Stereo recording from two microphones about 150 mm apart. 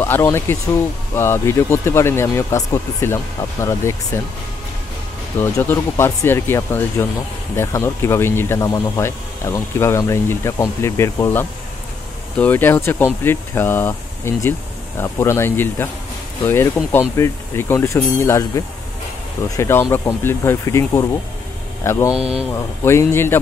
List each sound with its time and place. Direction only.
0.0 s speech: 15° left (ahead or behind)
5.4 s speech: 15° left (ahead or behind)
19.5 s speech: 20° left (ahead or behind)